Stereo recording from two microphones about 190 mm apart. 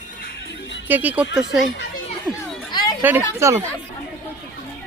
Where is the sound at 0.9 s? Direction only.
10° right (ahead or behind).